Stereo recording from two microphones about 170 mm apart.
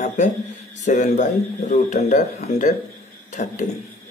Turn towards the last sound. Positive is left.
turn(degrees=45)  # may be behind; listen again after turning